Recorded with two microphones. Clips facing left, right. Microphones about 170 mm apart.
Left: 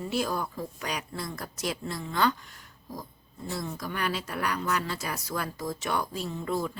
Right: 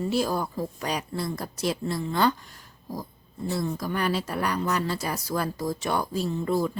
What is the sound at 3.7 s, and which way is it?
Speech, 35° right (ahead or behind).